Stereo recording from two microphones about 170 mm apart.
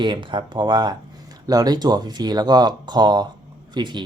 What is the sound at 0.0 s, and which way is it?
Speech, 30° right (ahead or behind).